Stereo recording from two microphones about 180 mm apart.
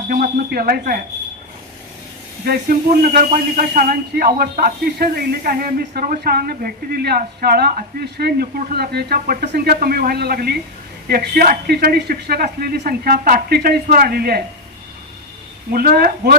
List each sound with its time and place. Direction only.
0.1 s speech: 55° right (ahead or behind)
2.4 s speech: 55° right (ahead or behind)
15.7 s speech: 55° right (ahead or behind)